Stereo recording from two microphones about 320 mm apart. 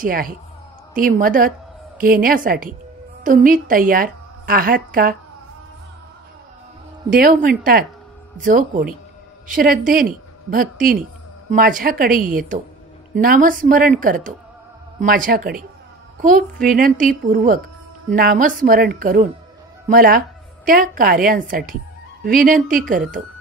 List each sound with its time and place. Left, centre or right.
0.0 s a woman's voice: right
7.1 s a woman's voice: right